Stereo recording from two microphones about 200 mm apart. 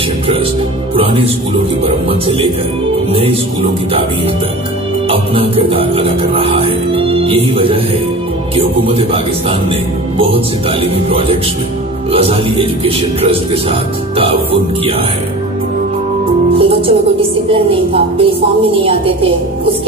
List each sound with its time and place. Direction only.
0.9 s music: 30° right (ahead or behind)
1.8 s speech: 25° right (ahead or behind)
5.0 s speech: 30° right (ahead or behind)
16.5 s music: 30° right (ahead or behind)
17.5 s speech: 30° right (ahead or behind)